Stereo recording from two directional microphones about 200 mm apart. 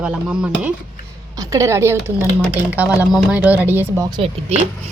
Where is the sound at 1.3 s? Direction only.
15° right (ahead or behind).